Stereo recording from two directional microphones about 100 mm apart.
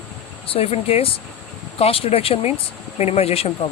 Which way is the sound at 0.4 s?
75° left (ahead or behind).